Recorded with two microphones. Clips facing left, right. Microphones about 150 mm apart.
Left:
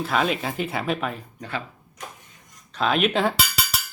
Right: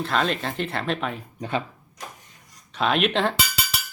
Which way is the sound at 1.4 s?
20° right (ahead or behind).